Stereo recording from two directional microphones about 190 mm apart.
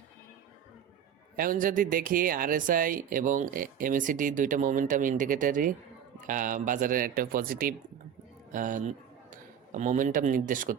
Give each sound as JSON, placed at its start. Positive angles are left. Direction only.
{"t": 1.4, "sound": "a man's voice", "side_deg": -45}